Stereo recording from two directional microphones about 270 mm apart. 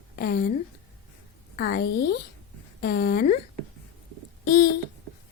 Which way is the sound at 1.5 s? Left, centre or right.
Left.